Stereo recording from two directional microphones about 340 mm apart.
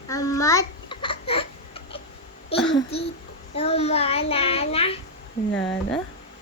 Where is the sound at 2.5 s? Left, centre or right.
Centre.